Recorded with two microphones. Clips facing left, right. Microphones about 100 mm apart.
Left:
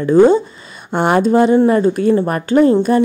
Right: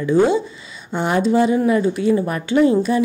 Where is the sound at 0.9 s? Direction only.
60° left (ahead or behind).